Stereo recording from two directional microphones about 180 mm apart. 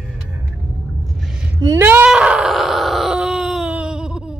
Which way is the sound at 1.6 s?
15° right (ahead or behind).